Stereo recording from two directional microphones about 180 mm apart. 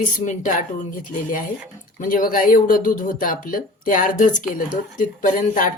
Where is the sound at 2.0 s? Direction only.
50° left (ahead or behind).